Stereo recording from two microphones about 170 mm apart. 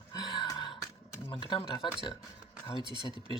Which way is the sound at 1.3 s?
30° left (ahead or behind).